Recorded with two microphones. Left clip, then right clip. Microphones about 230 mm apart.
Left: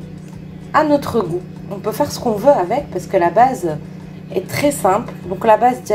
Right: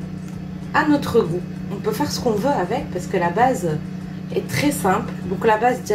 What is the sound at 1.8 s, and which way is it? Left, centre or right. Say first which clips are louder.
Speech: left 3 dB; left.